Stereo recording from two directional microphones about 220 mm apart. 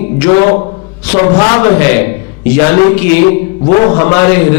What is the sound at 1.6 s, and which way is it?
Speech, 15° left (ahead or behind).